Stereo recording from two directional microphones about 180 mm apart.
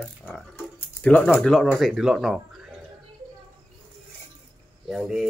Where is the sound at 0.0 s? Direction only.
10° left (ahead or behind).